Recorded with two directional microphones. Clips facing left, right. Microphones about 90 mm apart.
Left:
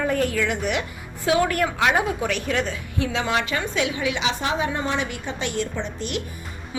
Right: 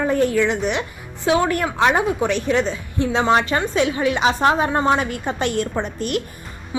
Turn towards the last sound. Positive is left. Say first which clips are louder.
# right 5 dB
turn(degrees=-50)  # may be behind; listen again after turning